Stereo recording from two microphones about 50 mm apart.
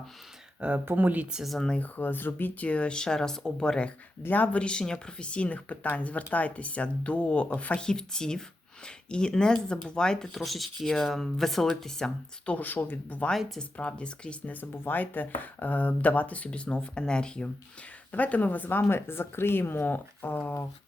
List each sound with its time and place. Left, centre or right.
0.9 s speech: right
1.8 s speech: left
2.6 s speech: left
4.3 s speech: left
4.6 s speech: centre
7.8 s speech: centre
10.3 s speech: centre
12.5 s speech: left
13.6 s speech: left
14.5 s speech: left; by 17.5 s centre
18.1 s speech: left